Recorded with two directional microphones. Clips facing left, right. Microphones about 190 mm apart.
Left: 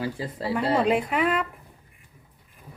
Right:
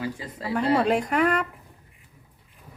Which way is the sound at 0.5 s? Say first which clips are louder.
Right 1 dB; 5° left (ahead or behind).